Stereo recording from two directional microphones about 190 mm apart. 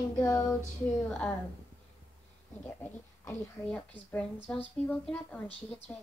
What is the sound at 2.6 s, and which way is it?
A child's voice, 10° left (ahead or behind).